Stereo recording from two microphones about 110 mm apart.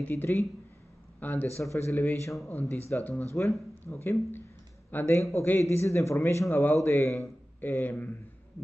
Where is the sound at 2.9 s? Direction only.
15° left (ahead or behind).